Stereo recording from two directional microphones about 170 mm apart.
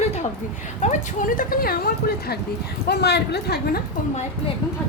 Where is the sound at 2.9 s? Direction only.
75° left (ahead or behind).